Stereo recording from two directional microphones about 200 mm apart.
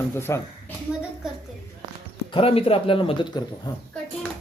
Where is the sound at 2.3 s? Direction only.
30° left (ahead or behind).